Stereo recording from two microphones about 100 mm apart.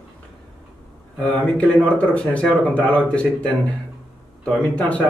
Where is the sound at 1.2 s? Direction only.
10° left (ahead or behind).